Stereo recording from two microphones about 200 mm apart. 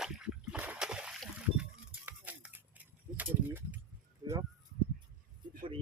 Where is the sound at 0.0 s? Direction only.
5° right (ahead or behind).